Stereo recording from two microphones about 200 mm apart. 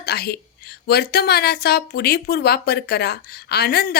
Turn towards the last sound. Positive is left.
turn(degrees=50)  # may be behind; listen again after turning